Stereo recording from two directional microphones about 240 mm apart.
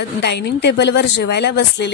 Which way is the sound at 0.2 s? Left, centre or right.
Left.